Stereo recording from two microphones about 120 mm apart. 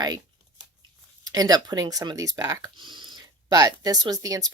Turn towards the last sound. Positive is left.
turn(degrees=-30)  # may be behind; listen again after turning